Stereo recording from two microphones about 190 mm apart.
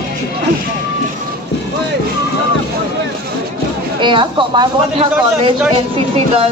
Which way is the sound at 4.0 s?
25° right (ahead or behind).